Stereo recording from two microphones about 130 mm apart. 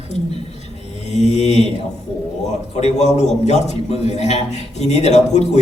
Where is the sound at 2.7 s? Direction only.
60° left (ahead or behind).